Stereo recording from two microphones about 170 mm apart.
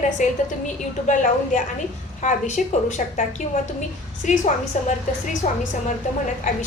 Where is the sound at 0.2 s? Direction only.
45° left (ahead or behind).